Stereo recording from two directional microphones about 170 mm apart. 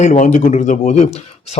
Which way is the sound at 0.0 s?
45° left (ahead or behind).